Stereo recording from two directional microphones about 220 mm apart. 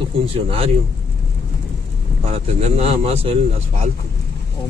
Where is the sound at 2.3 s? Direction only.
30° right (ahead or behind).